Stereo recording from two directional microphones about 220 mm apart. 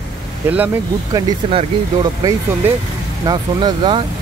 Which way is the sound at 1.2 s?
20° right (ahead or behind).